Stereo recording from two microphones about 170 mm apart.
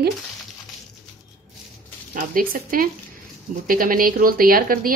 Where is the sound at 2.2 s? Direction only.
55° right (ahead or behind).